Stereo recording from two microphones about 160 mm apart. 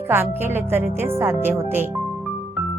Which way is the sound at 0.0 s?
15° right (ahead or behind).